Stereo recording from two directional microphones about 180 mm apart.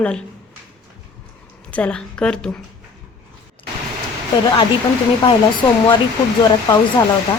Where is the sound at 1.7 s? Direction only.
5° left (ahead or behind).